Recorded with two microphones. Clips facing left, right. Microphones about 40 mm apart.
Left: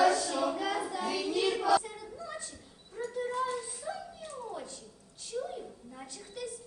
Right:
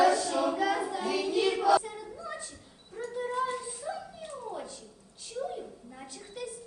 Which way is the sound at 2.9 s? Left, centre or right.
Centre.